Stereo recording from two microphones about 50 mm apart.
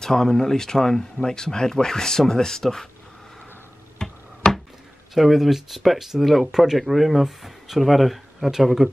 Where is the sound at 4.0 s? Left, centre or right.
Centre.